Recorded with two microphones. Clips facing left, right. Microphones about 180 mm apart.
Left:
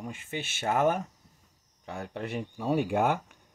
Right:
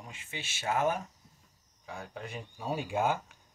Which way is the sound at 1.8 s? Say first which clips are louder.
Left 6 dB; 70° left (ahead or behind).